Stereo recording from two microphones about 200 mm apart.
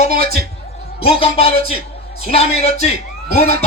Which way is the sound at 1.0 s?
30° left (ahead or behind).